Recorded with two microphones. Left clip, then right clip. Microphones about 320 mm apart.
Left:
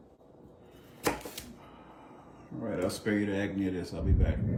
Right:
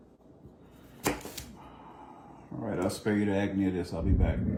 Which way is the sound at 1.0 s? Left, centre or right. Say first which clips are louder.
Even; centre.